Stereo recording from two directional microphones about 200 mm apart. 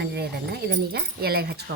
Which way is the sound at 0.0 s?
50° right (ahead or behind).